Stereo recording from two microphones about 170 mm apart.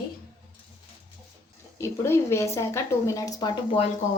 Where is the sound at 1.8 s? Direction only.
15° left (ahead or behind).